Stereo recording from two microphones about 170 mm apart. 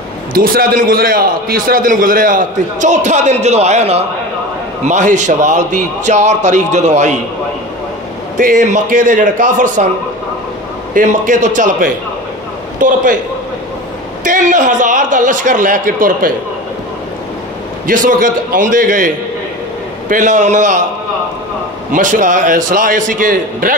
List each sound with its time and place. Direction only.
0.3 s a man's voice: 60° right (ahead or behind); by 7.2 s 45° right (ahead or behind)
8.4 s a man's voice: 50° right (ahead or behind)
11.0 s a man's voice: 50° right (ahead or behind)
14.2 s a man's voice: 50° right (ahead or behind)
17.8 s a man's voice: 55° right (ahead or behind)
20.1 s a man's voice: 45° right (ahead or behind)
21.9 s a man's voice: 50° right (ahead or behind)